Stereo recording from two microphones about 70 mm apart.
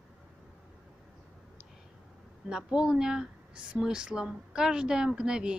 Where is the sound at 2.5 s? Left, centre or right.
Centre.